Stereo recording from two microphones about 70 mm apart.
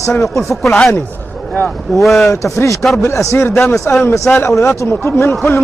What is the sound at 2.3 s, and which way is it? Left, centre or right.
Speech, left.